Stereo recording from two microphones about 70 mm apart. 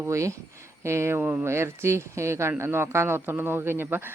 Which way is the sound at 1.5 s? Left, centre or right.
Right.